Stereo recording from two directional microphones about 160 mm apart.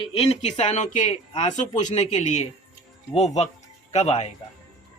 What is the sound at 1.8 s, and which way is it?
Speech, 45° left (ahead or behind).